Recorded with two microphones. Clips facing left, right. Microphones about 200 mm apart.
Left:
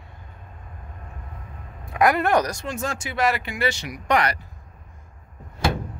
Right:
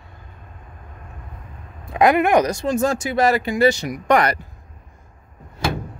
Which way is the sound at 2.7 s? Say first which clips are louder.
Right 9 dB; 40° right (ahead or behind).